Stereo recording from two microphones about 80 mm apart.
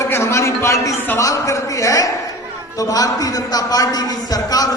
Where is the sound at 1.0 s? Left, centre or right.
Left.